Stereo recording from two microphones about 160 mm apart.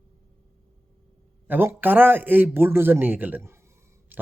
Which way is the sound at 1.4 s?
10° right (ahead or behind).